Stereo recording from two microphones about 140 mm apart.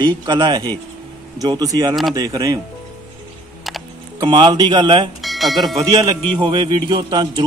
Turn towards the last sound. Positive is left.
turn(degrees=-35)  # may be behind; listen again after turning